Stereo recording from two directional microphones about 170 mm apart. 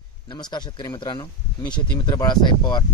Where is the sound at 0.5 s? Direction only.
25° left (ahead or behind).